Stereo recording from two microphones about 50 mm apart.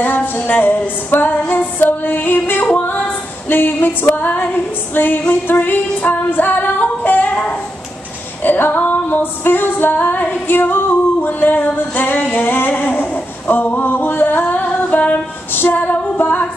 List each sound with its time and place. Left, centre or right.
0.0 s female singing: left
1.5 s music: left
2.8 s female singing: left
4.1 s music: left
8.8 s female singing: left